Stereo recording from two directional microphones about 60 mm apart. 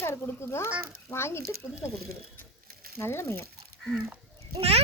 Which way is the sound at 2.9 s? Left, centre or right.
Left.